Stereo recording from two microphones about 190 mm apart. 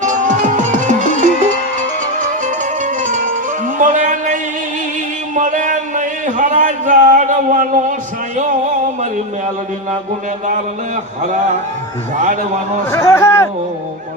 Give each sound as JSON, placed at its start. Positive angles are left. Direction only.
{"t": 0.0, "sound": "music", "side_deg": -40}
{"t": 3.8, "sound": "a sound", "side_deg": -40}
{"t": 12.8, "sound": "a man's voice", "side_deg": 15}